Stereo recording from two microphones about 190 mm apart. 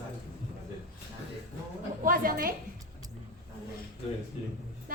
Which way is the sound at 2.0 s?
50° right (ahead or behind).